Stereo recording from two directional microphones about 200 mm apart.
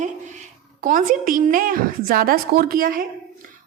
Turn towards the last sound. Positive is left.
turn(degrees=-45)  # may be behind; listen again after turning